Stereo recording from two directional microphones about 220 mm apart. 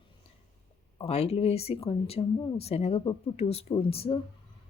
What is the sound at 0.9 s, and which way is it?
Speech, 30° left (ahead or behind).